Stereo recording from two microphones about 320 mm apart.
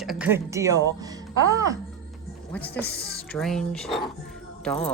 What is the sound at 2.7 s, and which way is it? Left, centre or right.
Speech, left.